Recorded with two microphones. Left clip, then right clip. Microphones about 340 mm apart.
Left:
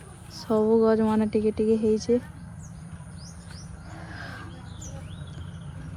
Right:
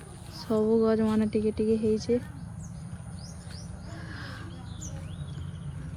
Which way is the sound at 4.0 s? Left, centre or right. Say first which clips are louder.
Left 3 dB; centre.